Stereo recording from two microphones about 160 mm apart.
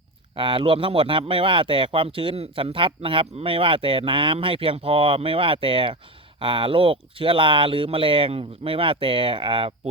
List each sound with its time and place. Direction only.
0.3 s speech: 30° right (ahead or behind)